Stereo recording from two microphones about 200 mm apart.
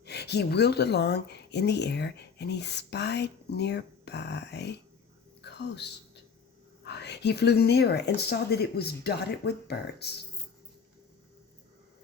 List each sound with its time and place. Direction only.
0.0 s speech: 55° left (ahead or behind)
5.4 s a sound: 55° left (ahead or behind)
6.8 s speech: 55° left (ahead or behind)